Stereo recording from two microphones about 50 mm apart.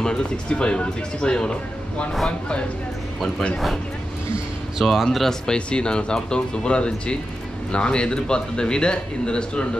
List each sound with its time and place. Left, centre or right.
0.0 s speech: centre
3.5 s speech: centre
4.8 s speech: centre
5.5 s speech: centre